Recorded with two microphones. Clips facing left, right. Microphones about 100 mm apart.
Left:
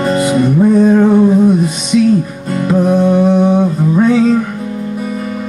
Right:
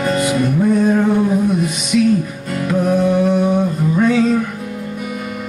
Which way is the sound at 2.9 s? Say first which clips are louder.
Left 3 dB; 30° left (ahead or behind).